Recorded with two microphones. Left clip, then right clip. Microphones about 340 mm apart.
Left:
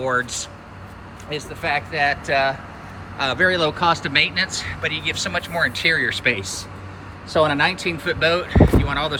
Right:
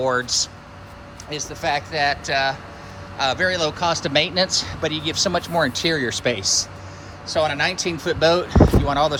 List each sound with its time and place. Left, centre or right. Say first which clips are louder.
0.0 s speech: even; centre
1.6 s speech: even; centre
7.3 s speech: left 3 dB; centre